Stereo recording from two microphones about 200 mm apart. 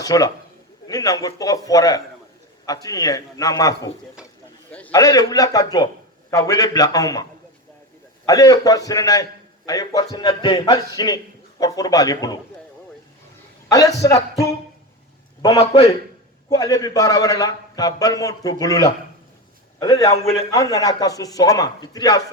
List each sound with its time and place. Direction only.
0.0 s a man's voice: 20° left (ahead or behind)
8.3 s a man's voice: 20° left (ahead or behind)
13.7 s a man's voice: 15° left (ahead or behind)
15.4 s a man's voice: 25° left (ahead or behind)
16.5 s a man's voice: 20° left (ahead or behind)